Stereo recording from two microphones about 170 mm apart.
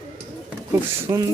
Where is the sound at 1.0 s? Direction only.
15° right (ahead or behind).